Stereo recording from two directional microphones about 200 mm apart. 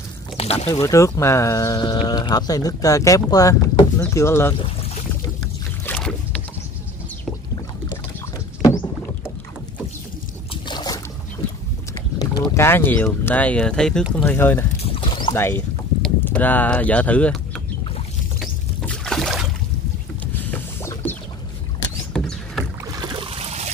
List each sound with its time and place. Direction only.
0.4 s speech: 30° left (ahead or behind)
0.7 s speech: 15° left (ahead or behind)
5.9 s boat: 5° left (ahead or behind)
10.5 s boat: 20° left (ahead or behind)
12.2 s speech: 15° left (ahead or behind)
14.8 s a sound: 25° left (ahead or behind)
15.3 s speech: 10° left (ahead or behind)
18.4 s rowboat: 5° left (ahead or behind)
20.5 s mechanisms: 10° left (ahead or behind)
22.1 s rowboat: centre (ahead or behind)
22.8 s boat: 20° right (ahead or behind)